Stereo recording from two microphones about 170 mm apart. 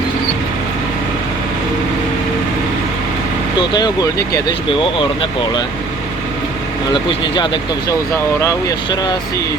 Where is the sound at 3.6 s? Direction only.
25° left (ahead or behind).